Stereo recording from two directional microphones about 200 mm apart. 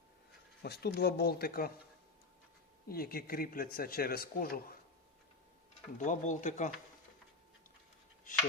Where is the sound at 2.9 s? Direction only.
50° left (ahead or behind).